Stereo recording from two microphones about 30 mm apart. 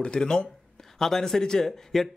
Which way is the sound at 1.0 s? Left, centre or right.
Centre.